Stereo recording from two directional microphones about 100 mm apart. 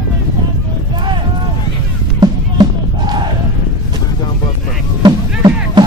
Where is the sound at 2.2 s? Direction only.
45° right (ahead or behind).